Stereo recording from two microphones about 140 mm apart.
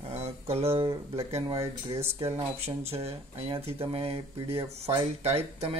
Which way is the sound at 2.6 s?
45° right (ahead or behind).